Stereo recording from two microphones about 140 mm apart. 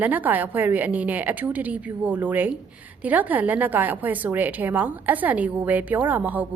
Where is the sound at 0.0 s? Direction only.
10° right (ahead or behind).